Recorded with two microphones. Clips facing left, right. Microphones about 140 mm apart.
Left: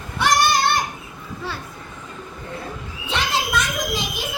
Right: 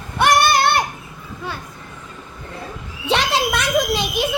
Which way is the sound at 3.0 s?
75° right (ahead or behind).